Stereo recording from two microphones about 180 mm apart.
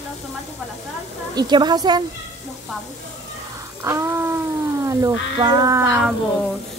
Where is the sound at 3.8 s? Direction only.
15° right (ahead or behind).